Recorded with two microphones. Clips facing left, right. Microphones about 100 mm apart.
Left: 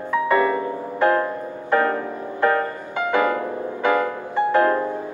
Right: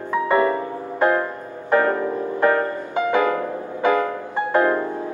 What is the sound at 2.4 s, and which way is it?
Music, 20° right (ahead or behind).